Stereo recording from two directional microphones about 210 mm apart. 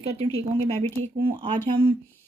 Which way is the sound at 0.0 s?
30° right (ahead or behind).